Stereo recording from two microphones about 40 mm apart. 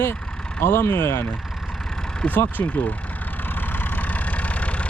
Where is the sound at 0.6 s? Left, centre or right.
Left.